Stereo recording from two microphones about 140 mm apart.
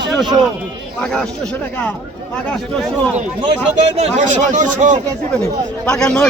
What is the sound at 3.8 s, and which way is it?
Speech, 50° right (ahead or behind).